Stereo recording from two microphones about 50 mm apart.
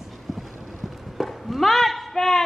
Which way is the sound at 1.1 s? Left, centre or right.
Centre.